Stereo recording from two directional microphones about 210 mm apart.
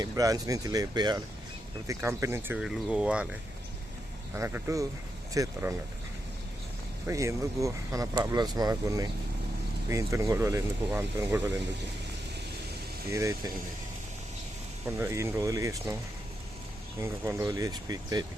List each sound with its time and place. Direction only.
0.0 s speech: 15° right (ahead or behind)
2.6 s speech: centre (ahead or behind)
4.4 s speech: 10° right (ahead or behind)
7.1 s speech: 15° right (ahead or behind)
13.1 s speech: 15° right (ahead or behind)
14.8 s speech: 10° right (ahead or behind)
17.0 s speech: 15° right (ahead or behind)